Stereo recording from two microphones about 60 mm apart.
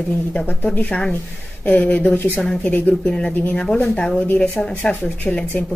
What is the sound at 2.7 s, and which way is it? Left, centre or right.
Speech, left.